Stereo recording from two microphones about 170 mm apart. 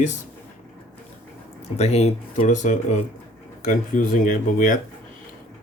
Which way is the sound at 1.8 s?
40° left (ahead or behind).